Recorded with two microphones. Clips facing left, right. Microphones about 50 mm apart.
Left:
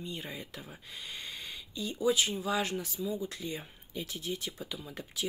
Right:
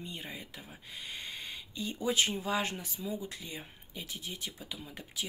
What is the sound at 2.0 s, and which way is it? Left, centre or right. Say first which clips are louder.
Speech: left 2 dB; right.